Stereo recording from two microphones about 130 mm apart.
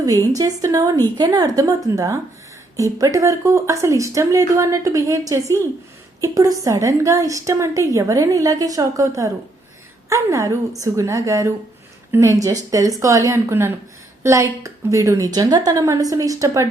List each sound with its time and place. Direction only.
0.3 s a woman's voice: 25° right (ahead or behind)
2.7 s a woman's voice: 25° right (ahead or behind)